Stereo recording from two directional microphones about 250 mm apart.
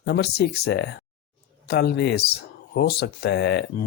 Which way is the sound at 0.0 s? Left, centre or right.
Left.